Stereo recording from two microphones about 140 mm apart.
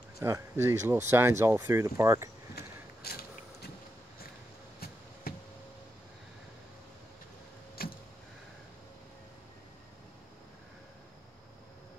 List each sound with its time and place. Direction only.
0.2 s speech: 20° right (ahead or behind)
3.0 s mechanisms: 90° left
4.7 s a sound: 90° left
7.8 s vehicle: 90° left